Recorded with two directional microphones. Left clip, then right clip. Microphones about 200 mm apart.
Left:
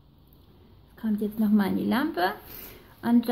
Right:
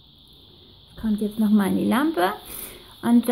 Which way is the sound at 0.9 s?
20° right (ahead or behind).